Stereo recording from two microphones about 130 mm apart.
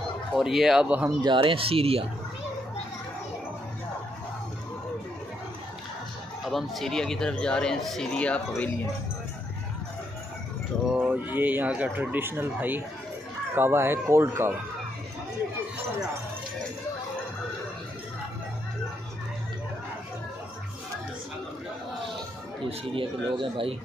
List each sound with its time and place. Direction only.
0.3 s speech: 5° right (ahead or behind)
1.2 s speech: 40° right (ahead or behind)
6.4 s speech: centre (ahead or behind)
10.9 s speech: 10° right (ahead or behind)
22.7 s speech: 40° right (ahead or behind)